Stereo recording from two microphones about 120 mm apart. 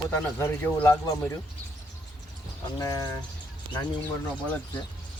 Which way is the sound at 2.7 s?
30° left (ahead or behind).